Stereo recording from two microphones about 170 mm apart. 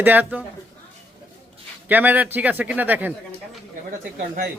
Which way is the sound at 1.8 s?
10° right (ahead or behind).